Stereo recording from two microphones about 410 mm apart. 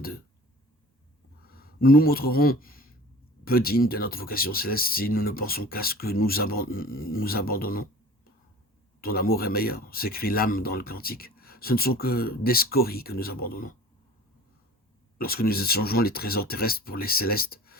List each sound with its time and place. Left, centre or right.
1.5 s speech: left
15.2 s speech: left